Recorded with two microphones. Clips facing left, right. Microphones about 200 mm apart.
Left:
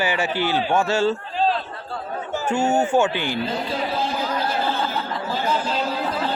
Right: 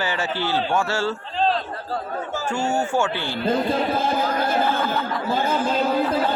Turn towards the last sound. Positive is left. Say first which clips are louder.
# right 3 dB
turn(degrees=-50)  # may be behind; listen again after turning